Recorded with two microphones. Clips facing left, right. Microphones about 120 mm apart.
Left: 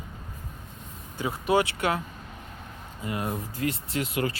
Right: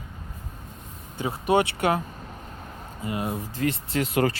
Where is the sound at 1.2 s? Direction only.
25° right (ahead or behind).